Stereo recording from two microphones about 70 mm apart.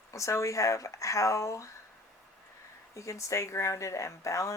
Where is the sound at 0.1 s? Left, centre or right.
Left.